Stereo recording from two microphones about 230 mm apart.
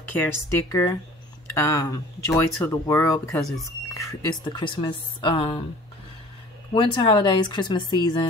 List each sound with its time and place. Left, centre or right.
0.2 s speech: centre
6.7 s speech: left